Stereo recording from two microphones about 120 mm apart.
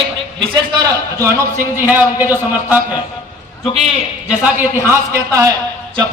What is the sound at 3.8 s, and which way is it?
Speech, 10° right (ahead or behind).